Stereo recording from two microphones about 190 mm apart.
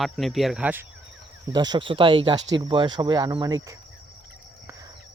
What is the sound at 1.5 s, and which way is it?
Speech, 25° right (ahead or behind).